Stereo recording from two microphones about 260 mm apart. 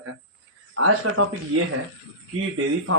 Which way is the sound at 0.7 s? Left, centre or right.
Right.